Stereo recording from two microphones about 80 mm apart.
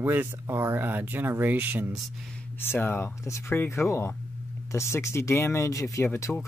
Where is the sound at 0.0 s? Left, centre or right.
Right.